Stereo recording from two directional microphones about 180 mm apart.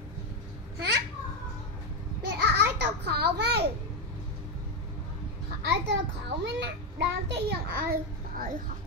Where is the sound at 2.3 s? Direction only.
65° right (ahead or behind).